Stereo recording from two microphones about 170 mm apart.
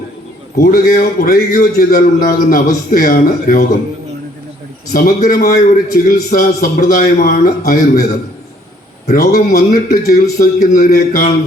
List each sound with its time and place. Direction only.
0.5 s a man's voice: 55° left (ahead or behind)
4.9 s a man's voice: 55° left (ahead or behind)
9.1 s a man's voice: 60° left (ahead or behind)